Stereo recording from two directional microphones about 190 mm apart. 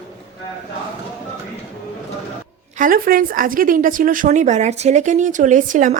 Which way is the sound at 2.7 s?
45° right (ahead or behind).